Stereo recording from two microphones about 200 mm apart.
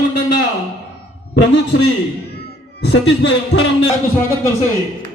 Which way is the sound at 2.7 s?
60° left (ahead or behind).